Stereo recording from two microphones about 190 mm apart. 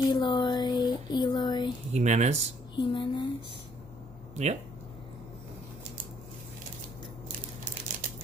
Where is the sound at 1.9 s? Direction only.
40° right (ahead or behind).